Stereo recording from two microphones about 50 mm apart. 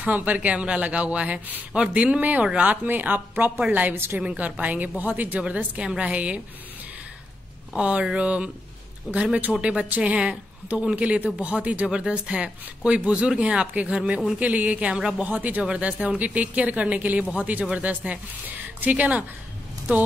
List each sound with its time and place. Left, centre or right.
0.0 s a man's voice: right
7.7 s a man's voice: right
9.8 s a woman's voice: right
10.1 s a man's voice: right